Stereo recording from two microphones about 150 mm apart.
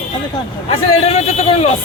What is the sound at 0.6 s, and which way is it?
A man's voice, 45° left (ahead or behind).